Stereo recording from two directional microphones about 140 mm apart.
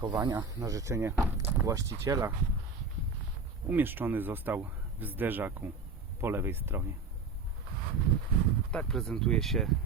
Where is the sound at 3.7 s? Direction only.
15° right (ahead or behind).